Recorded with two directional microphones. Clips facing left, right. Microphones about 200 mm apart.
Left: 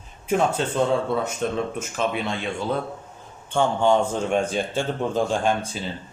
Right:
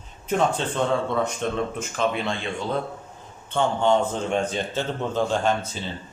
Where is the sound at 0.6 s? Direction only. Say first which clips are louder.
Left 2 dB; 5° left (ahead or behind).